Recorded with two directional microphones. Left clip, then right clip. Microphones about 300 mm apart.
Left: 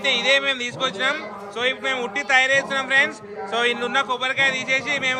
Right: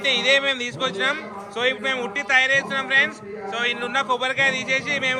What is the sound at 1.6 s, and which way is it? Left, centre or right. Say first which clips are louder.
Speech: even; centre.